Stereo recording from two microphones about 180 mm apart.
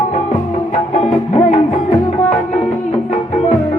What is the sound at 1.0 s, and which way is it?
Music, 35° left (ahead or behind).